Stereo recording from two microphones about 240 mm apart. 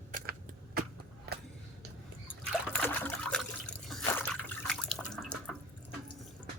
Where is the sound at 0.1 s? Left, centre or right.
Right.